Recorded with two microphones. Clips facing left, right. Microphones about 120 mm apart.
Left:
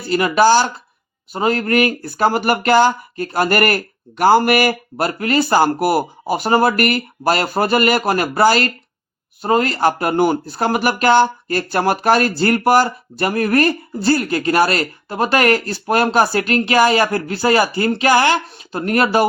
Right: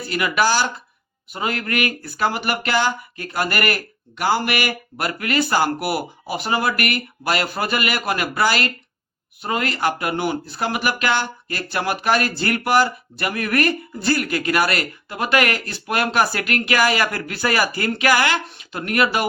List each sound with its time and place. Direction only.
0.1 s speech: 30° left (ahead or behind)